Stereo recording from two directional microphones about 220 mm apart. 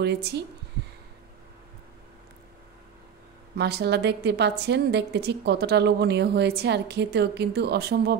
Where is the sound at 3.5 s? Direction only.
50° right (ahead or behind).